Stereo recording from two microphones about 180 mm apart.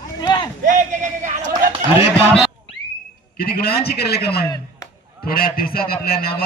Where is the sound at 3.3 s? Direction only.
60° left (ahead or behind).